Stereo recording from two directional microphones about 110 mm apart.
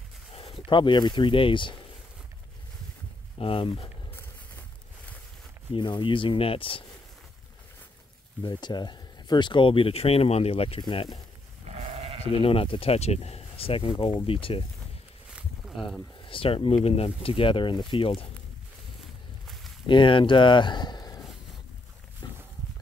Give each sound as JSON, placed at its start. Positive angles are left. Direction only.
{"t": 0.3, "sound": "speech", "side_deg": 60}
{"t": 3.3, "sound": "speech", "side_deg": 55}
{"t": 4.1, "sound": "a sound", "side_deg": 20}
{"t": 5.8, "sound": "speech", "side_deg": 45}
{"t": 8.4, "sound": "speech", "side_deg": 40}
{"t": 10.8, "sound": "speech", "side_deg": 50}
{"t": 11.6, "sound": "sheep", "side_deg": -80}
{"t": 12.3, "sound": "speech", "side_deg": 60}
{"t": 15.3, "sound": "a sound", "side_deg": -5}
{"t": 16.3, "sound": "speech", "side_deg": 55}
{"t": 19.9, "sound": "speech", "side_deg": 50}
{"t": 22.2, "sound": "wild animals", "side_deg": 35}